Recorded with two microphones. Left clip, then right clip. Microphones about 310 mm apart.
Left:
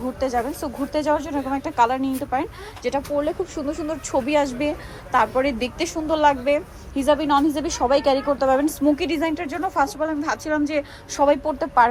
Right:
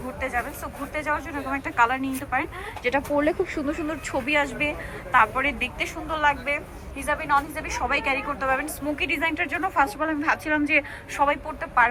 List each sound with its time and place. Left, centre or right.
0.2 s a woman's voice: centre
3.2 s a woman's voice: centre